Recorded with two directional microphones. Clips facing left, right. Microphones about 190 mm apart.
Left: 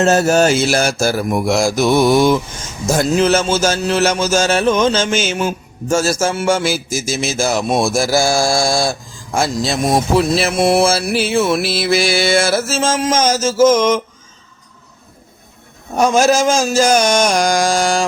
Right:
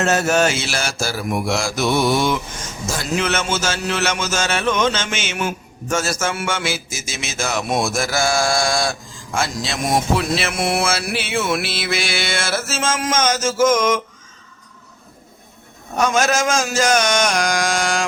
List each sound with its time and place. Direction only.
0.0 s music: 30° left (ahead or behind)
13.6 s mantra: 25° left (ahead or behind)
16.0 s music: 30° left (ahead or behind)